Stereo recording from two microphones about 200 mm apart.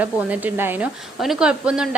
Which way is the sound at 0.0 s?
10° right (ahead or behind).